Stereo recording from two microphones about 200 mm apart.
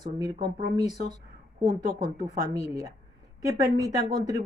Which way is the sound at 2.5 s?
15° right (ahead or behind).